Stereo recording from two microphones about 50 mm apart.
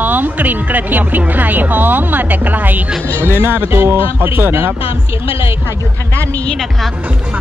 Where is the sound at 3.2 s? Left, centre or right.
Right.